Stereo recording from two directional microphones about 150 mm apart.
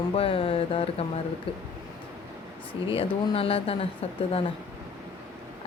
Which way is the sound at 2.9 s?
40° left (ahead or behind).